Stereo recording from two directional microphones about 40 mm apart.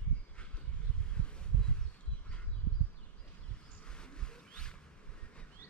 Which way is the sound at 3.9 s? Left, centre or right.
Left.